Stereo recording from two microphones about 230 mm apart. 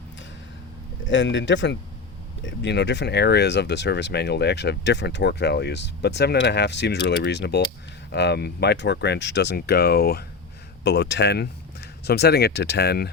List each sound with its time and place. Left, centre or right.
1.0 s speech: left